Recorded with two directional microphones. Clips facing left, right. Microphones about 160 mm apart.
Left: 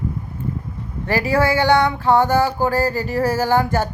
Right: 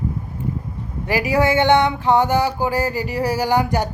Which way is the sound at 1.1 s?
15° right (ahead or behind).